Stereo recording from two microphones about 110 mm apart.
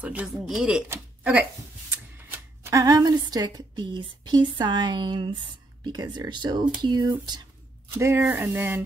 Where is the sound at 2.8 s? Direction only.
35° right (ahead or behind).